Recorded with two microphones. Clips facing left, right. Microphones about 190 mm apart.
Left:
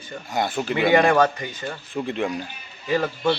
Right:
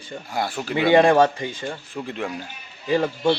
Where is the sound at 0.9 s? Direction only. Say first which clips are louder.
Right 3 dB; 30° right (ahead or behind).